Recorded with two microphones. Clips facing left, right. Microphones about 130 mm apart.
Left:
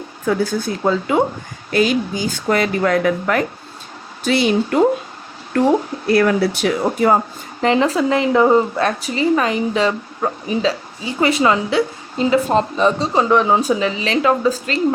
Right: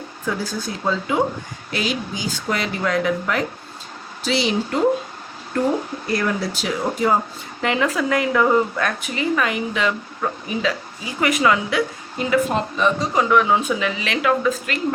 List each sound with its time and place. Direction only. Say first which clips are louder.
0.3 s speech: left 7 dB; 55° left (ahead or behind)
6.1 s speech: left 8 dB; 65° left (ahead or behind)
7.6 s speech: left 5 dB; 30° left (ahead or behind)